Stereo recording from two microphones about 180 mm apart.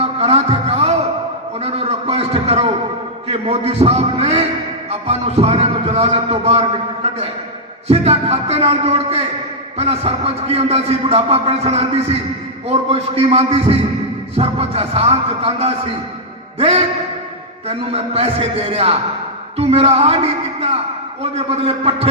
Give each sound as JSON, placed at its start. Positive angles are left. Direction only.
{"t": 0.0, "sound": "music", "side_deg": -35}
{"t": 1.5, "sound": "a sound", "side_deg": -35}
{"t": 3.2, "sound": "a man's voice", "side_deg": -35}